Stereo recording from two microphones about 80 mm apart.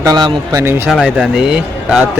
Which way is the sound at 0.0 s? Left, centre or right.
Right.